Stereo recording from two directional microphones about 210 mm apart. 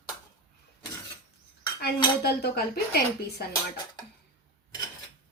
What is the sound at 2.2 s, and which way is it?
A woman's voice, 50° left (ahead or behind).